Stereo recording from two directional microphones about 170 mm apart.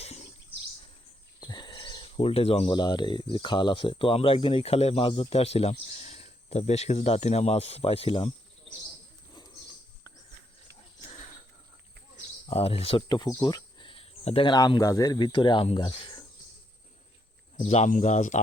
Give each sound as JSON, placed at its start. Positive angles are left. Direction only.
{"t": 1.4, "sound": "speech", "side_deg": 25}
{"t": 12.1, "sound": "speech", "side_deg": 35}
{"t": 17.6, "sound": "speech", "side_deg": 40}